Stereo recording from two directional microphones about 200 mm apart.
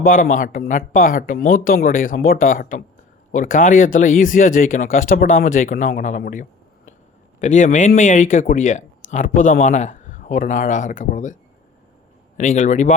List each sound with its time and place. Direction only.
0.0 s speech: 40° left (ahead or behind)
12.4 s speech: 35° left (ahead or behind)